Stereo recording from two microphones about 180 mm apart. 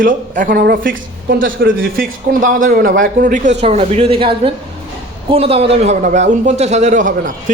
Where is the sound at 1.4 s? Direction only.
90° right.